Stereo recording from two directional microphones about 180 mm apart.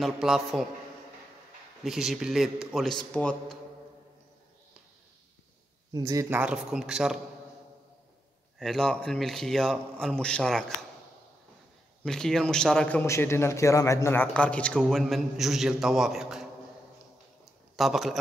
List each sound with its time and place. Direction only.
0.0 s a man's voice: centre (ahead or behind)
1.9 s a man's voice: centre (ahead or behind)
5.9 s speech: 20° right (ahead or behind)
6.4 s a man's voice: 5° right (ahead or behind)
8.5 s a man's voice: centre (ahead or behind)
12.0 s a man's voice: 5° left (ahead or behind)
17.7 s a man's voice: centre (ahead or behind)